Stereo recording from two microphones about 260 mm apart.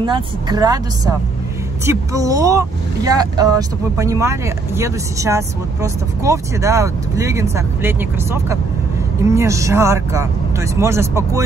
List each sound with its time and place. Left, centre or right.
0.0 s speech: centre